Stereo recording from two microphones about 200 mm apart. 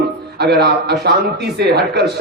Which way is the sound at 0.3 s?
55° right (ahead or behind).